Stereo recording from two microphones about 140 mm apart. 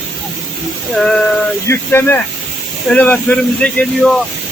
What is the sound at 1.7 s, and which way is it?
Speech, 15° left (ahead or behind).